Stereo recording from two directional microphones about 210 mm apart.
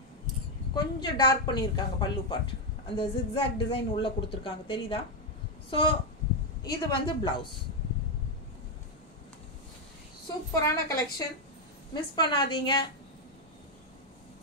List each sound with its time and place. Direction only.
0.7 s a woman's voice: 20° left (ahead or behind)
10.5 s a woman's voice: 15° left (ahead or behind)